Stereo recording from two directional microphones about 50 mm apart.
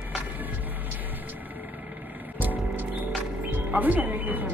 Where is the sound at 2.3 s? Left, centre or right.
Right.